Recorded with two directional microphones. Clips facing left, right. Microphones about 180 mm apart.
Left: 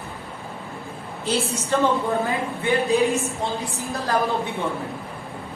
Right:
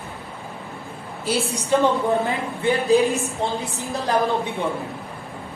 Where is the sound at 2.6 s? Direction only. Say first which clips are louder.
Right 3 dB; 35° right (ahead or behind).